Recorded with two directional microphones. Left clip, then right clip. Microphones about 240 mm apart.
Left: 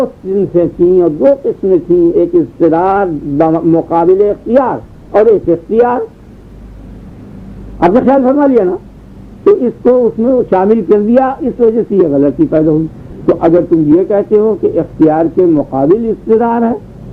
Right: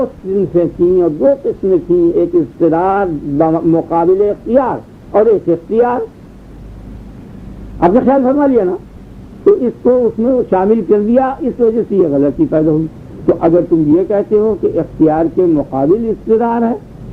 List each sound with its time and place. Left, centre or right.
0.0 s speech: left
7.8 s speech: left